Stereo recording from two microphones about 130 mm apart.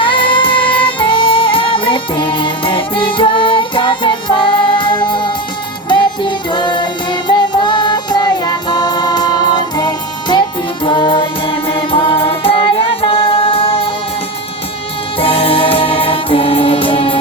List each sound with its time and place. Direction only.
0.0 s music: 40° left (ahead or behind)
15.2 s music: 45° left (ahead or behind)